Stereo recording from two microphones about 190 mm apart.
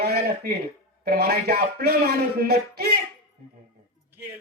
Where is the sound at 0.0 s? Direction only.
60° right (ahead or behind).